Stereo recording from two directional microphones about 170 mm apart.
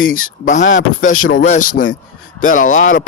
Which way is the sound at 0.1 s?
55° left (ahead or behind).